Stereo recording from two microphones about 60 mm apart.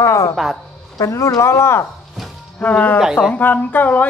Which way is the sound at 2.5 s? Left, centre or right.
Left.